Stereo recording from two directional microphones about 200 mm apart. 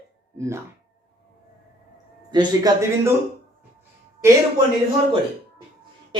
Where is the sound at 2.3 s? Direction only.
20° right (ahead or behind).